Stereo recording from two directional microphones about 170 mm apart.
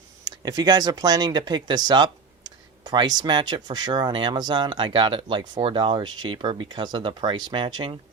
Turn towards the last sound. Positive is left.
turn(degrees=-30)  # may be behind; listen again after turning